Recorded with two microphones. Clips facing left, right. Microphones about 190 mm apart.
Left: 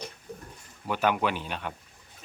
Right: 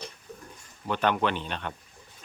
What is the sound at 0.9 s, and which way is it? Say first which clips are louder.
Speech: even; 10° left (ahead or behind).